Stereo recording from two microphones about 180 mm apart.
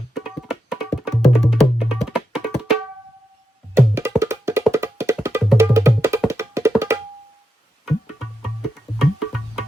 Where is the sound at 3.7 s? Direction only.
15° right (ahead or behind).